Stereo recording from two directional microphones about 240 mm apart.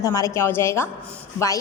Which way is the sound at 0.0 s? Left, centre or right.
Centre.